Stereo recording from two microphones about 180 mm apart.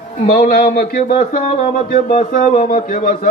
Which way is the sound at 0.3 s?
55° left (ahead or behind).